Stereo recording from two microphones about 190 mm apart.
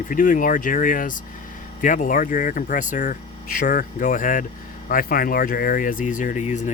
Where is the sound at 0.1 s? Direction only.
45° left (ahead or behind).